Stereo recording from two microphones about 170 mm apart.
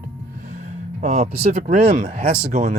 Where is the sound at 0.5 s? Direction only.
45° right (ahead or behind).